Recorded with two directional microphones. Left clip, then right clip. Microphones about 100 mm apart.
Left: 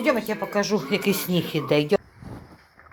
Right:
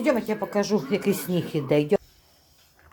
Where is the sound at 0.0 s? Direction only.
20° right (ahead or behind).